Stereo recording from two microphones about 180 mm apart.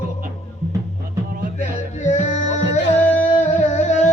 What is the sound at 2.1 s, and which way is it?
Music, 40° left (ahead or behind).